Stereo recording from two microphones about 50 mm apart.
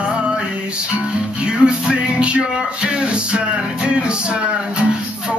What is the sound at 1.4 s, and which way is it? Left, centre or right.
Music, centre.